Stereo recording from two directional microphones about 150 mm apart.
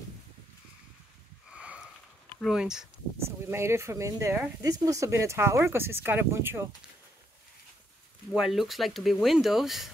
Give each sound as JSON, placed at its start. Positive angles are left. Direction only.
{"t": 1.5, "sound": "sniff", "side_deg": -5}
{"t": 2.4, "sound": "speech", "side_deg": -5}
{"t": 3.3, "sound": "speech", "side_deg": -15}
{"t": 8.3, "sound": "speech", "side_deg": 0}